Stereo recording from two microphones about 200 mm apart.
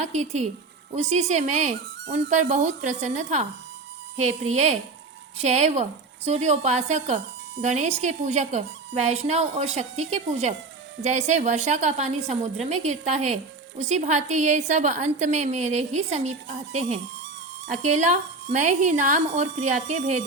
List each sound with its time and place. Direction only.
0.0 s speech: 35° right (ahead or behind)